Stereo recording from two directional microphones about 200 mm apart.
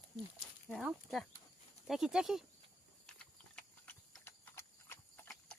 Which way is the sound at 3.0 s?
5° left (ahead or behind).